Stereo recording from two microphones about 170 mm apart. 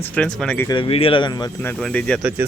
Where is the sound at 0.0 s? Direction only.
5° left (ahead or behind).